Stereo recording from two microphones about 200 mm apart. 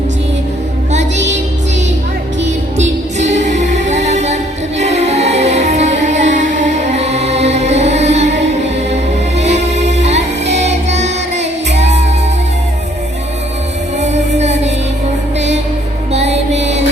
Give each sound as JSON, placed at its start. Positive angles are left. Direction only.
{"t": 3.2, "sound": "music", "side_deg": -35}
{"t": 14.0, "sound": "music", "side_deg": -35}
{"t": 16.1, "sound": "music", "side_deg": -35}